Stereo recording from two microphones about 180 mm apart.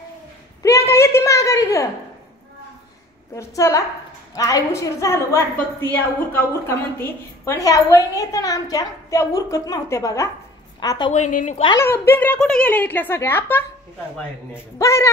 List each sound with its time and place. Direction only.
0.6 s a sound: 15° left (ahead or behind)
3.3 s a woman's voice: 15° left (ahead or behind)
11.1 s a woman's voice: 40° left (ahead or behind)
11.8 s a woman's voice: 15° left (ahead or behind)